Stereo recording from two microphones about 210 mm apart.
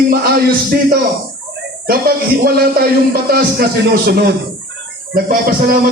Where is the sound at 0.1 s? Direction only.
45° right (ahead or behind).